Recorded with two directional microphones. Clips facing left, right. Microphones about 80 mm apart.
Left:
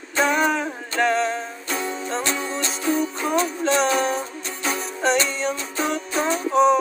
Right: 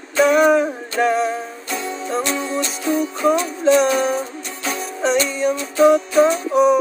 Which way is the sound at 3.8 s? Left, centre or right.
Centre.